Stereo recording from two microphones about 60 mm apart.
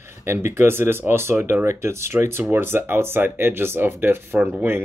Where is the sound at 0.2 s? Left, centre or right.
Right.